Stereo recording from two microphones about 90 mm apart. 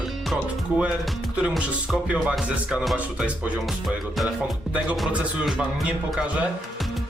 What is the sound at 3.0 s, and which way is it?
Speech, 15° right (ahead or behind).